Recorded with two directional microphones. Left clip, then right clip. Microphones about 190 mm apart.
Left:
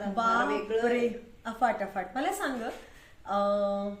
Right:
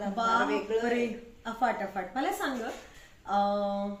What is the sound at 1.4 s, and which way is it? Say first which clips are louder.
A woman's voice: left 1 dB; 20° left (ahead or behind).